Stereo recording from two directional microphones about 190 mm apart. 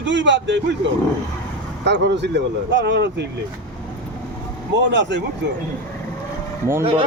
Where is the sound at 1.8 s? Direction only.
65° right (ahead or behind).